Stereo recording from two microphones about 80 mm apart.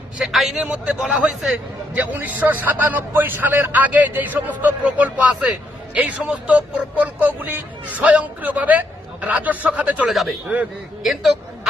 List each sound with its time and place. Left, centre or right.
0.2 s a man's voice: centre
10.1 s speech: centre